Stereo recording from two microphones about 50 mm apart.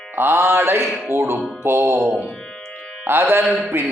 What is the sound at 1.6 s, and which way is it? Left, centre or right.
Mantra, right.